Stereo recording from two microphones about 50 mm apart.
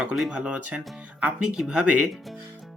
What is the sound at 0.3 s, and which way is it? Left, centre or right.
Speech, right.